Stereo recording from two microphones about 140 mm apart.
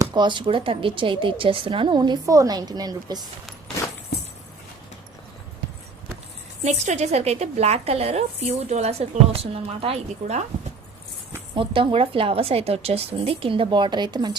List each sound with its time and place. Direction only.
0.0 s speech: 35° right (ahead or behind)
6.6 s a woman's voice: 50° right (ahead or behind)
11.5 s speech: 40° right (ahead or behind)